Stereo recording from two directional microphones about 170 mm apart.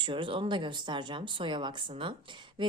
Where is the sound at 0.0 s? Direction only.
30° right (ahead or behind).